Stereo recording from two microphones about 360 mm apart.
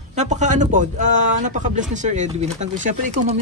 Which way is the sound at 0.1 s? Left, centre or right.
Centre.